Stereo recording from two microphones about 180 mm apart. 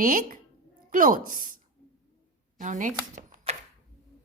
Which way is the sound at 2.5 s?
45° right (ahead or behind).